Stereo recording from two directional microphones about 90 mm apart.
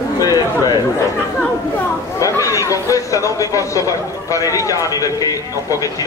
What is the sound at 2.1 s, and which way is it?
Chatter, 35° left (ahead or behind).